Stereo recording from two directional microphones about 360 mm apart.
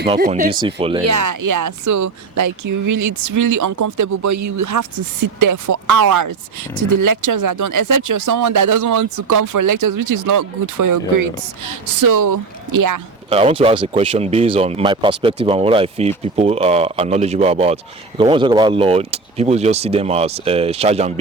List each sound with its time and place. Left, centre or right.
0.1 s speech: centre
1.0 s speech: right
13.3 s speech: centre